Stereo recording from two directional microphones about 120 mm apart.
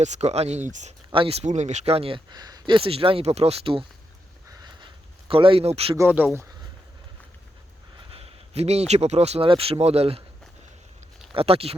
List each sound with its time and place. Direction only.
0.0 s speech: 70° right (ahead or behind); by 0.9 s 85° right
1.1 s speech: 50° right (ahead or behind)
2.3 s speech: 35° right (ahead or behind)
4.4 s a sound: 35° right (ahead or behind)
5.3 s speech: 50° right (ahead or behind)
6.0 s speech: 15° right (ahead or behind)
8.1 s speech: 60° right (ahead or behind)
11.3 s speech: 50° right (ahead or behind)